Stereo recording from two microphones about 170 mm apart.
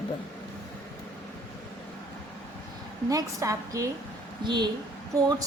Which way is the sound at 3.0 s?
20° right (ahead or behind).